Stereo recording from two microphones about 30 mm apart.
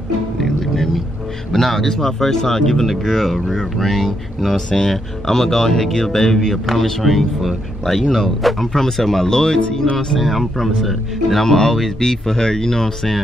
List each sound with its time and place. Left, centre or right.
0.4 s music: centre
1.5 s speech: centre
2.9 s speech: centre
4.6 s speech: left
6.6 s speech: centre
8.7 s speech: centre
9.3 s speech: left
10.2 s speech: centre
11.4 s speech: centre